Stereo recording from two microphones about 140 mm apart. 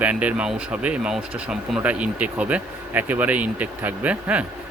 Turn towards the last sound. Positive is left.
turn(degrees=-10)  # may be behind; listen again after turning